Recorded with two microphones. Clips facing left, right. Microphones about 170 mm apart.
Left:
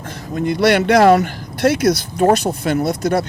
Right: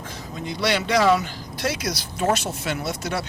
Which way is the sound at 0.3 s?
60° left (ahead or behind).